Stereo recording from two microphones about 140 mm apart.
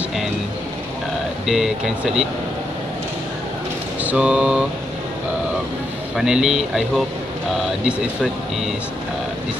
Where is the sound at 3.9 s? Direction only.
10° right (ahead or behind).